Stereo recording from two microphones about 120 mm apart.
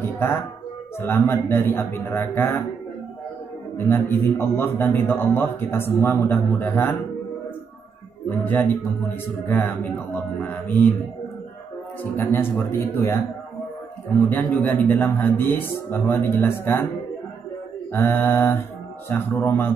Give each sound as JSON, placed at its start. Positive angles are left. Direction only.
{"t": 0.0, "sound": "music", "side_deg": 20}
{"t": 0.9, "sound": "a man's voice", "side_deg": 20}
{"t": 3.7, "sound": "a man's voice", "side_deg": 20}
{"t": 8.3, "sound": "a man's voice", "side_deg": 15}
{"t": 12.0, "sound": "a man's voice", "side_deg": 15}
{"t": 17.9, "sound": "a man's voice", "side_deg": 15}